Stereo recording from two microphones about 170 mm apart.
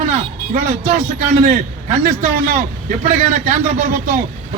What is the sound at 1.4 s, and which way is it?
A man's voice, 55° right (ahead or behind).